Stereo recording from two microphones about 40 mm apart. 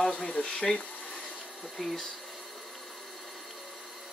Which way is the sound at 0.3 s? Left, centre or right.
Left.